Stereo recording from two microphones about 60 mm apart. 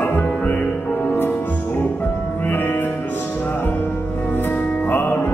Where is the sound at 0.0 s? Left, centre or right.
Left.